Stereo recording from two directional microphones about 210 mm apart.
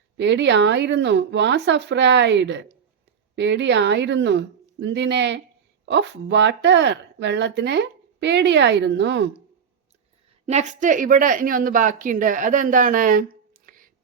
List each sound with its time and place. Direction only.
0.2 s speech: 55° right (ahead or behind)
10.4 s speech: 35° right (ahead or behind)